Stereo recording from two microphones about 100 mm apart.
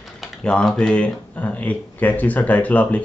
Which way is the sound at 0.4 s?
10° left (ahead or behind).